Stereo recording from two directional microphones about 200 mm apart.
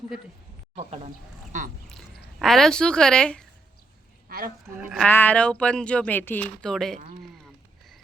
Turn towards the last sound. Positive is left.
turn(degrees=0)  # may be behind; listen again after turning